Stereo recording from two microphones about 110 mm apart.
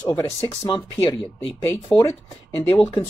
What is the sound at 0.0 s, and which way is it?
Speech, 15° left (ahead or behind).